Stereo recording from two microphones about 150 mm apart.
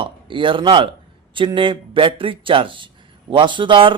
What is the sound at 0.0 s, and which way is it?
A man's voice, 35° right (ahead or behind).